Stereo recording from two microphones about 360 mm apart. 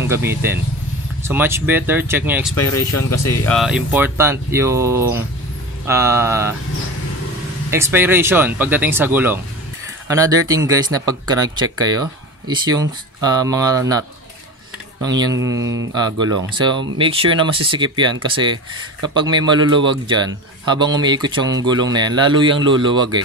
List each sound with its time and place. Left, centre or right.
0.1 s speech: centre
7.7 s speech: centre
15.0 s speech: centre
15.5 s mantra: right
15.9 s speech: centre